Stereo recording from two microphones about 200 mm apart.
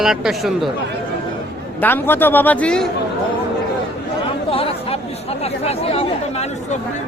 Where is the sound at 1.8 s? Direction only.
10° left (ahead or behind).